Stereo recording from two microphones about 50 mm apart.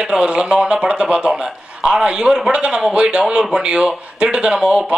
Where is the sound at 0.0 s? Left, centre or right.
Centre.